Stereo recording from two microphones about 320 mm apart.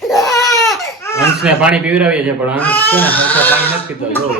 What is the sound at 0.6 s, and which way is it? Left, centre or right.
Speech, centre.